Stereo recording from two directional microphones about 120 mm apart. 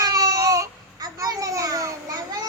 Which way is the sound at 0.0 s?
30° right (ahead or behind).